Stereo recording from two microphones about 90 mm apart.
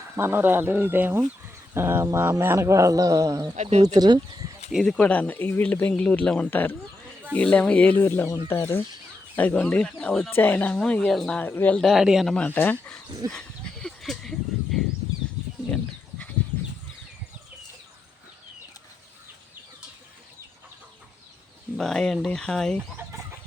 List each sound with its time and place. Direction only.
0.2 s speech: 25° right (ahead or behind); by 3.4 s 40° right (ahead or behind)
3.9 s speech: 50° right (ahead or behind)
4.7 s speech: 5° left (ahead or behind)
4.9 s speech: 15° left (ahead or behind)
6.5 s speech: 20° left (ahead or behind)
9.3 s speech: 15° left (ahead or behind)
11.1 s speech: 5° left (ahead or behind)
11.3 s speech: 20° left (ahead or behind)
11.8 s speech: centre (ahead or behind)
12.3 s speech: 15° left (ahead or behind)
13.3 s a sound: 5° left (ahead or behind)
15.7 s goat: 15° left (ahead or behind)
21.8 s speech: 5° left (ahead or behind)